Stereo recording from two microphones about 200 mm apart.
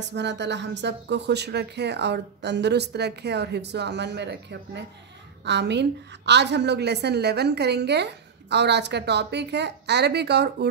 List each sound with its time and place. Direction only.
0.1 s a woman's voice: 60° right (ahead or behind)